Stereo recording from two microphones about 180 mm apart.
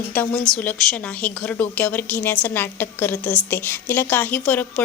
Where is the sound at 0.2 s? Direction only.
5° left (ahead or behind).